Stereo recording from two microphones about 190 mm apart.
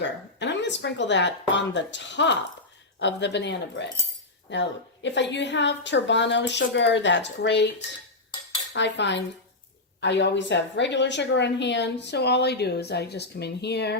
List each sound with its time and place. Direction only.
0.0 s a woman's voice: 70° left (ahead or behind)
8.7 s a woman's voice: 65° left (ahead or behind)